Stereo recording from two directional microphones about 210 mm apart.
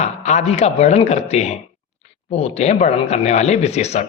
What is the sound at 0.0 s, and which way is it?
Speech, 35° left (ahead or behind).